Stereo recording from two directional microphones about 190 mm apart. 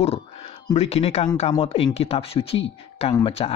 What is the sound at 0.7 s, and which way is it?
Speech, 35° left (ahead or behind).